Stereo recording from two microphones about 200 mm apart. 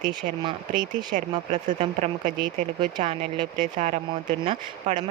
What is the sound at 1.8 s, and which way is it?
Speech, 35° right (ahead or behind).